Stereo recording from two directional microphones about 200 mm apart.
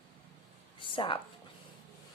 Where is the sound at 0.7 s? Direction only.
25° left (ahead or behind).